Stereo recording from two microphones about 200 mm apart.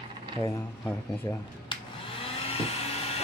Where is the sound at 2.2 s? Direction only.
30° left (ahead or behind).